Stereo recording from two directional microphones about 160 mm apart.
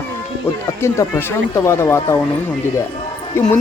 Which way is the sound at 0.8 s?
15° left (ahead or behind).